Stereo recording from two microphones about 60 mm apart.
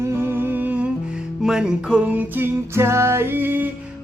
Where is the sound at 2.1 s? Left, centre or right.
Right.